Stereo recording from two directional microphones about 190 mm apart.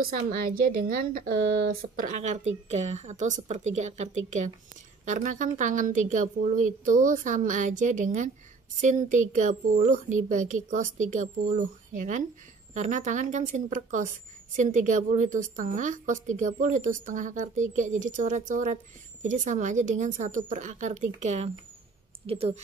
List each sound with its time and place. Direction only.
0.0 s a woman's voice: 50° right (ahead or behind); by 22.6 s 30° right (ahead or behind)